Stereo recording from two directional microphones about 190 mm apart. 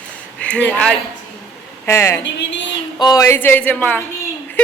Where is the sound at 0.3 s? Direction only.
5° left (ahead or behind).